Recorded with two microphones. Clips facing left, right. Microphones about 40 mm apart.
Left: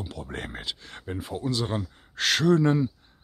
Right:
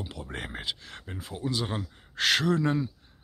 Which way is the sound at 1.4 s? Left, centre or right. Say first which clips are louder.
Left 1 dB; centre.